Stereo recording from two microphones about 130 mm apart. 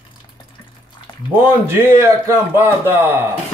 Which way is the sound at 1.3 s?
20° right (ahead or behind).